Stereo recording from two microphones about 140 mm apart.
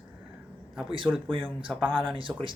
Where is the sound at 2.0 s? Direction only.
35° right (ahead or behind).